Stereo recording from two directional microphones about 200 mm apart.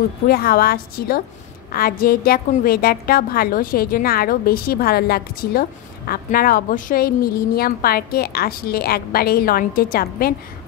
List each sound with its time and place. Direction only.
0.3 s a woman's voice: 50° left (ahead or behind)